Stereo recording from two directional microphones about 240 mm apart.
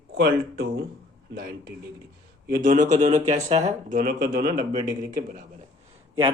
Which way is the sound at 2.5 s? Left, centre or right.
Right.